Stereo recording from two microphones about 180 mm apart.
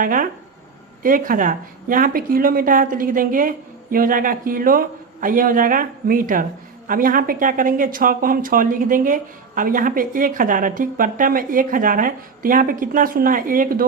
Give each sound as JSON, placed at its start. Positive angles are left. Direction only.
{"t": 0.0, "sound": "speech", "side_deg": -50}